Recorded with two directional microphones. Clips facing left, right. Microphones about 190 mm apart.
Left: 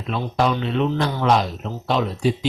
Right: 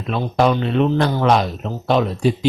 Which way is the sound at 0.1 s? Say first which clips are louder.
Right 4 dB; 55° right (ahead or behind).